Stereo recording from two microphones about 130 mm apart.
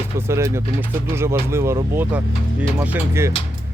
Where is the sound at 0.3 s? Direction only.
20° right (ahead or behind).